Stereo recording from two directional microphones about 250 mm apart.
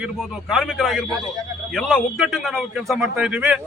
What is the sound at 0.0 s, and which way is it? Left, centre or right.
A man's voice, centre.